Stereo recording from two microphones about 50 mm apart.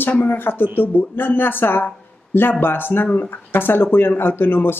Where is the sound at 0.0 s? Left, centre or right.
Left.